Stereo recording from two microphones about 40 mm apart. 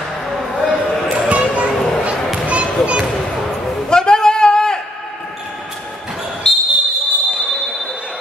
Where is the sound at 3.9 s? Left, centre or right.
Centre.